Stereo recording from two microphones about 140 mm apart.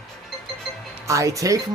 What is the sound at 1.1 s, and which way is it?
Speech, 20° right (ahead or behind).